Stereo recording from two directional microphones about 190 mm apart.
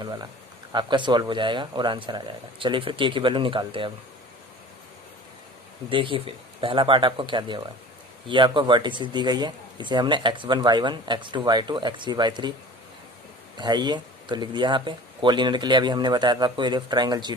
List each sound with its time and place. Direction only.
0.0 s speech: 20° right (ahead or behind)
5.9 s speech: 25° right (ahead or behind)
13.6 s speech: 25° right (ahead or behind)